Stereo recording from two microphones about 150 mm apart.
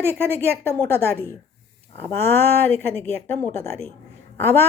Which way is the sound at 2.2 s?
15° left (ahead or behind).